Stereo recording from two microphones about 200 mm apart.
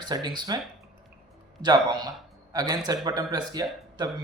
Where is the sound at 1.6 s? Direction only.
20° right (ahead or behind).